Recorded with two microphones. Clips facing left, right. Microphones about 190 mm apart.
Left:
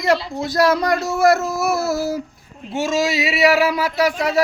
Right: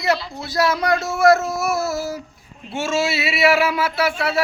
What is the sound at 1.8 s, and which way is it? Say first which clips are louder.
Speech: left 3 dB; 35° left (ahead or behind).